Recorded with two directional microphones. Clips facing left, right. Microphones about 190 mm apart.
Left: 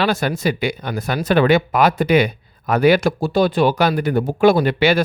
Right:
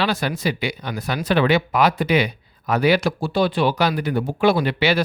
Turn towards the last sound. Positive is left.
turn(degrees=50)  # may be behind; listen again after turning